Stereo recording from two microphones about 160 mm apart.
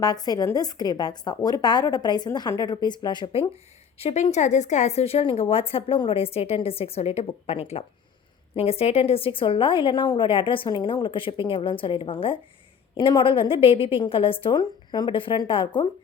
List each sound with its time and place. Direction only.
0.0 s a woman's voice: 25° left (ahead or behind)
4.0 s a woman's voice: 45° left (ahead or behind); by 15.9 s 30° left (ahead or behind)